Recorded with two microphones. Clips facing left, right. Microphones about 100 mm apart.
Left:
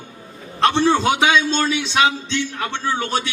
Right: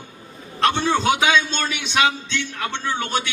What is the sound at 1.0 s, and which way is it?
Speech, 25° left (ahead or behind).